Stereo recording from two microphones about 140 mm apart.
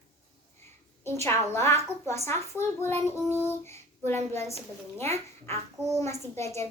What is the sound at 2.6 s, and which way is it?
Child singing, 15° left (ahead or behind).